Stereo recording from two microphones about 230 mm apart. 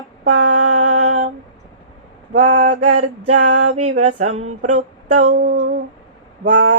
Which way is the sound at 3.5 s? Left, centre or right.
Right.